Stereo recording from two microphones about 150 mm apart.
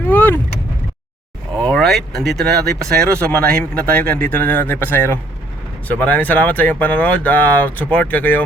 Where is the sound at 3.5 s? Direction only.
90° right.